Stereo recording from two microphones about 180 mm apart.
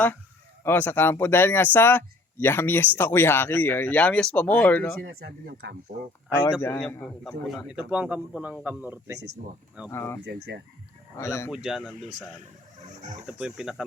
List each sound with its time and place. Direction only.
0.6 s speech: 10° left (ahead or behind)
5.0 s speech: 65° right (ahead or behind)
6.6 s speech: 15° left (ahead or behind)
7.3 s a man's voice: centre (ahead or behind)
9.9 s speech: 15° left (ahead or behind)
10.2 s speech: 65° right (ahead or behind)
11.2 s speech: 15° left (ahead or behind)
11.5 s speech: 5° right (ahead or behind)
13.2 s speech: 5° right (ahead or behind)